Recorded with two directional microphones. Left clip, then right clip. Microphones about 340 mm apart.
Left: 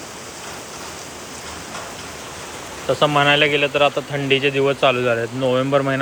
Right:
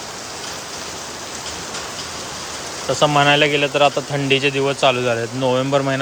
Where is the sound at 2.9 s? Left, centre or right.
Centre.